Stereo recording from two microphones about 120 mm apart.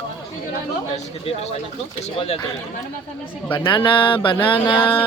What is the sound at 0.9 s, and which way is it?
Speech, 60° left (ahead or behind).